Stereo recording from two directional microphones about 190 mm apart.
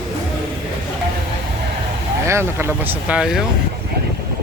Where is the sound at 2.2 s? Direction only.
15° right (ahead or behind).